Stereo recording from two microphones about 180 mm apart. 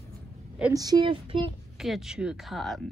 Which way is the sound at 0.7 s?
20° right (ahead or behind).